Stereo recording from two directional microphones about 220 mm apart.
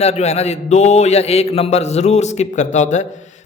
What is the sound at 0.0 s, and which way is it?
A man's voice, 30° left (ahead or behind).